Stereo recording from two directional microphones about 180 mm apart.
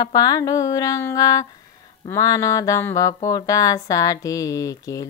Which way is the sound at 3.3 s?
20° left (ahead or behind).